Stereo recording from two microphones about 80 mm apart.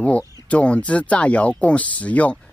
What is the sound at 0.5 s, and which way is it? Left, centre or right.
Speech, centre.